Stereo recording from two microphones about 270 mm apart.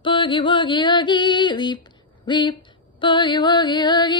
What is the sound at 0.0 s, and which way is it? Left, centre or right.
Music, centre.